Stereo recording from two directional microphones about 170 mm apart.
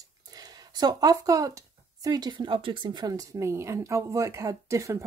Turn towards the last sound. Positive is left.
turn(degrees=-15)  # may be behind; listen again after turning